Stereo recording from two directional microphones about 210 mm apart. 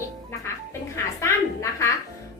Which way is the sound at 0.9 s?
15° left (ahead or behind).